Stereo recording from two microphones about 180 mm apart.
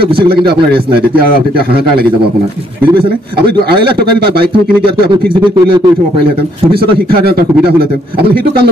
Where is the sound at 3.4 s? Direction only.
60° right (ahead or behind).